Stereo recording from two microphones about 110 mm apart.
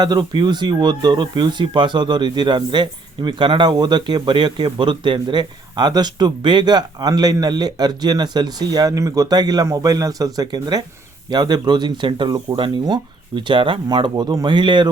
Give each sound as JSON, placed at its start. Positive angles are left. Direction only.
{"t": 0.0, "sound": "speech", "side_deg": -40}